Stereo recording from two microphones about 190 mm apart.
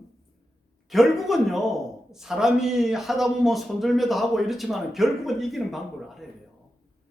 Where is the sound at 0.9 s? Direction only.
Centre (ahead or behind).